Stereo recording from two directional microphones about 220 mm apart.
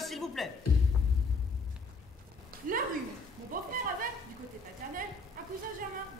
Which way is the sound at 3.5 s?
40° right (ahead or behind).